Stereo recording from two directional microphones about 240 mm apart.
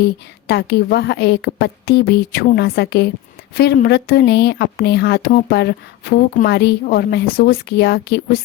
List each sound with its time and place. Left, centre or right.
0.4 s speech: left